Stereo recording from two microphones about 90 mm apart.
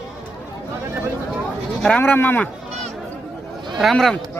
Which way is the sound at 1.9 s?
20° left (ahead or behind).